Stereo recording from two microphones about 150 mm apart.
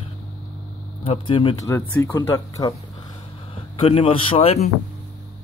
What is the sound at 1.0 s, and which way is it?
Speech, 35° left (ahead or behind).